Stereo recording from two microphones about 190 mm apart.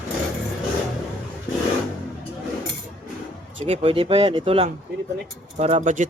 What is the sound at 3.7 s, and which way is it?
Speech, 30° right (ahead or behind).